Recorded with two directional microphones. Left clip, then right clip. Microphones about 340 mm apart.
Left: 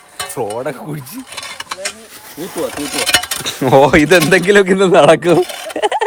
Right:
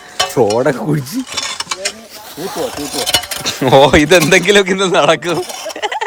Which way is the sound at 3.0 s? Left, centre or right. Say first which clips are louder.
Left 1 dB; centre.